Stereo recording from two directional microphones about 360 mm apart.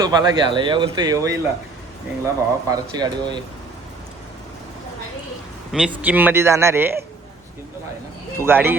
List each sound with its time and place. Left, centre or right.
0.0 s speech: centre
5.7 s speech: centre
8.4 s speech: centre